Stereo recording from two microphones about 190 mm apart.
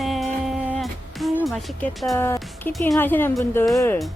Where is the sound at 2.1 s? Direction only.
15° left (ahead or behind).